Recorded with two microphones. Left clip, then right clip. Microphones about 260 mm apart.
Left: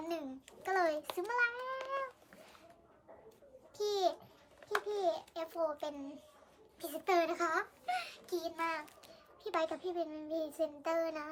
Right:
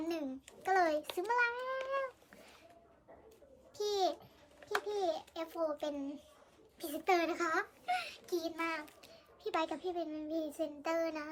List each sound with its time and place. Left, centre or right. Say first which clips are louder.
0.0 s child singing: right 2 dB; centre
3.8 s babbling: even; centre
4.6 s a sound: left 1 dB; centre
6.7 s a child's voice: even; centre